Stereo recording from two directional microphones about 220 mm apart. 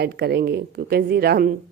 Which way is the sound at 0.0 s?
45° right (ahead or behind).